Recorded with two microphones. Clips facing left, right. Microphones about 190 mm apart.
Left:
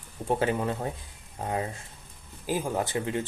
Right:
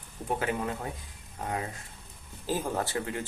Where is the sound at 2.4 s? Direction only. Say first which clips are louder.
Left 2 dB; 10° left (ahead or behind).